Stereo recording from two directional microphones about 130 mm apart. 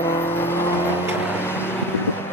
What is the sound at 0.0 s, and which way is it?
Vehicle, 15° left (ahead or behind).